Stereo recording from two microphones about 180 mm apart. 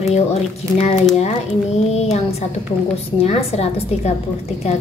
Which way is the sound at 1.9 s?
35° left (ahead or behind).